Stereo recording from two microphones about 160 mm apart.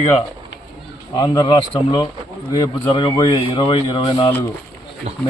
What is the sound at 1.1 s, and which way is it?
A man's voice, 25° left (ahead or behind).